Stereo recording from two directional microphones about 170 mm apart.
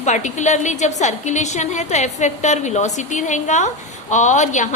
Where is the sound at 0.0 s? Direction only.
45° left (ahead or behind).